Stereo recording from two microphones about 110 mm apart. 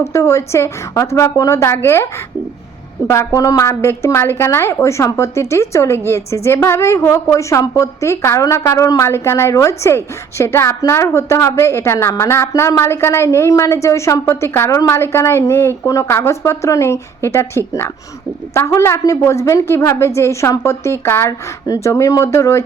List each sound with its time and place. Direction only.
0.0 s a woman's voice: 25° left (ahead or behind)
3.1 s a woman's voice: 25° left (ahead or behind)